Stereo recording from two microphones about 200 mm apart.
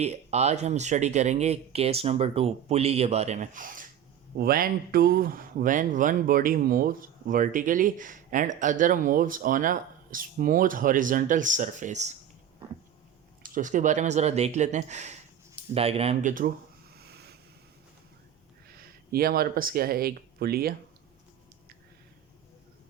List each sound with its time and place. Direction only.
0.0 s speech: 35° right (ahead or behind)
13.4 s speech: 40° right (ahead or behind)
16.9 s a sound: 55° right (ahead or behind)
18.7 s speech: 50° right (ahead or behind)